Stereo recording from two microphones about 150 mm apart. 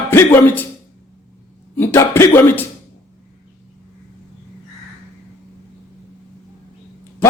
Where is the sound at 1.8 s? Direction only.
15° left (ahead or behind).